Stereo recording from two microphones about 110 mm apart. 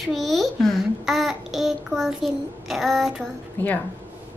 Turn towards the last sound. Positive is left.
turn(degrees=15)  # may be behind; listen again after turning